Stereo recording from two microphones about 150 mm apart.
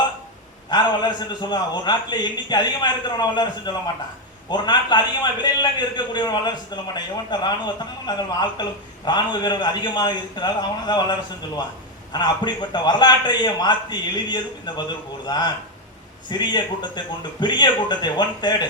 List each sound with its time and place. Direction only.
0.7 s a man's voice: 30° left (ahead or behind)
12.1 s a man's voice: 30° left (ahead or behind)